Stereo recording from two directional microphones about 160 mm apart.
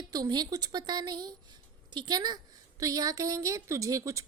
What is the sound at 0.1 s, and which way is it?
Speech, 25° right (ahead or behind).